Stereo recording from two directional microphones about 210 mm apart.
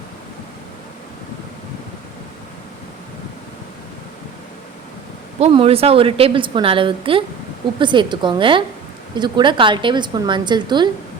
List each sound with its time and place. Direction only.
5.4 s a woman's voice: 25° right (ahead or behind)